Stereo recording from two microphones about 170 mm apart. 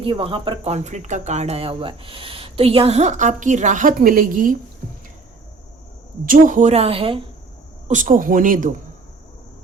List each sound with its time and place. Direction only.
0.0 s speech: 30° right (ahead or behind); by 4.5 s 55° right (ahead or behind)
6.2 s speech: 55° right (ahead or behind); by 7.3 s 30° right (ahead or behind)
7.9 s speech: 50° right (ahead or behind)